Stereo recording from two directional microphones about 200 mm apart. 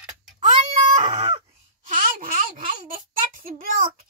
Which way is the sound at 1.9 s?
45° right (ahead or behind).